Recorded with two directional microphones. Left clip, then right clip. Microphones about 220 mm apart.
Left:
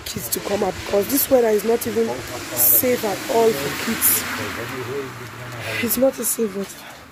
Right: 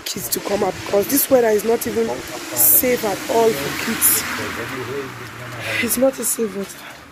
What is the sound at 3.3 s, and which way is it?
Speech, centre (ahead or behind).